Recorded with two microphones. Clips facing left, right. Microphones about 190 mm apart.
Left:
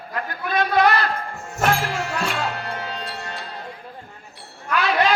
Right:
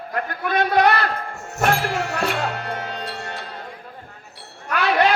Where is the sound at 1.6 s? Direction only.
55° right (ahead or behind).